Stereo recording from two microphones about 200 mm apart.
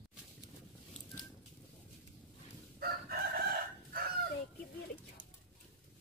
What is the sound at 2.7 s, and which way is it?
Chicken, 50° right (ahead or behind).